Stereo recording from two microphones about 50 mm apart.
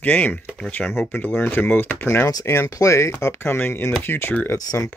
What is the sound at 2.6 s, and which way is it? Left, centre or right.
Speech, left.